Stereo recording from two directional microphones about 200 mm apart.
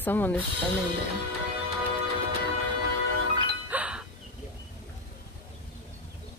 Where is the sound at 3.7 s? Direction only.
5° right (ahead or behind).